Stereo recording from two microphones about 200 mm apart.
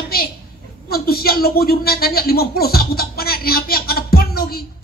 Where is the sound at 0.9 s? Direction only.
50° left (ahead or behind).